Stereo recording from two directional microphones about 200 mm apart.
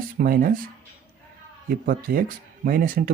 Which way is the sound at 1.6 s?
45° right (ahead or behind).